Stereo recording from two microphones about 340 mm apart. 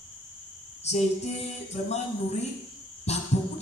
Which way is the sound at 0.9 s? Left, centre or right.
Centre.